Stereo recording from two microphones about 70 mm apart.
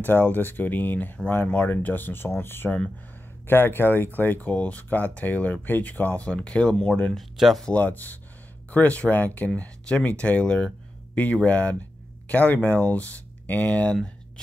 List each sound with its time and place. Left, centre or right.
0.0 s speech: left
7.2 s speech: centre
7.6 s speech: left